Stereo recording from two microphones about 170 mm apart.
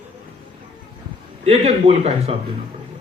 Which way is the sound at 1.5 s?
35° right (ahead or behind).